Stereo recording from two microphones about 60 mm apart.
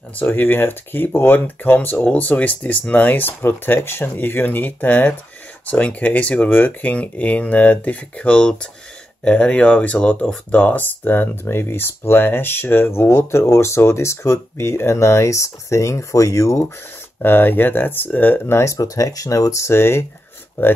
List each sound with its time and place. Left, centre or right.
0.3 s speech: left
17.2 s speech: left
18.5 s speech: left